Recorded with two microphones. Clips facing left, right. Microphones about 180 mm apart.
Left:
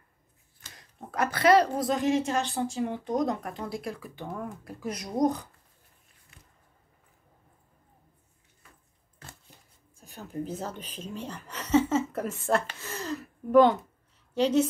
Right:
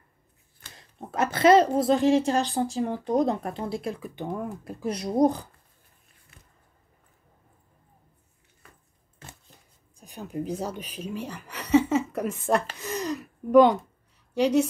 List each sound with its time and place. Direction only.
0.7 s speech: 25° right (ahead or behind)
9.9 s a woman's voice: 15° right (ahead or behind)